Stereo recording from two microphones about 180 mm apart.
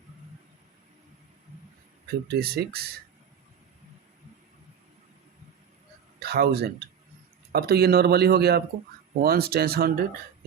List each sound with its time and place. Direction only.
2.2 s speech: 60° right (ahead or behind)
6.1 s a man's voice: 65° right (ahead or behind)